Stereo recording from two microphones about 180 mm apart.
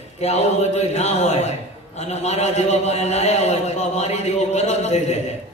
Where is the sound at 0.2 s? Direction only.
35° left (ahead or behind).